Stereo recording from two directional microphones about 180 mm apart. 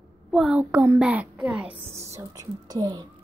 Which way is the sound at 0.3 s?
5° right (ahead or behind).